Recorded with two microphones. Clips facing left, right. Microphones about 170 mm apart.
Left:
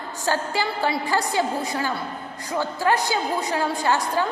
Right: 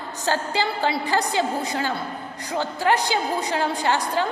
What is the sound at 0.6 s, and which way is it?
A woman's voice, 25° right (ahead or behind).